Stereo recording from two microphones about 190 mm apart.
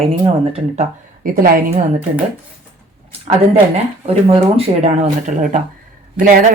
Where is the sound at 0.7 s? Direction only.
50° right (ahead or behind).